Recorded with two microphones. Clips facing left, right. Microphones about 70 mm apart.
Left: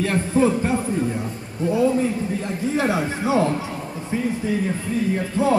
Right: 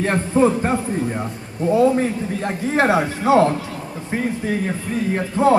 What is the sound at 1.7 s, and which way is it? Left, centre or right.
A man's voice, right.